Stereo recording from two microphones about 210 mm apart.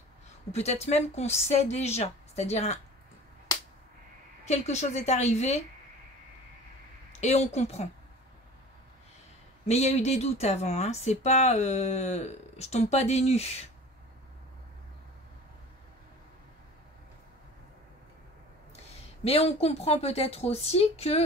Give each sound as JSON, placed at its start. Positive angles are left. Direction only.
{"t": 0.5, "sound": "speech", "side_deg": 30}
{"t": 4.5, "sound": "speech", "side_deg": 35}
{"t": 7.1, "sound": "a woman's voice", "side_deg": 30}
{"t": 9.7, "sound": "speech", "side_deg": 30}
{"t": 19.2, "sound": "a woman's voice", "side_deg": 30}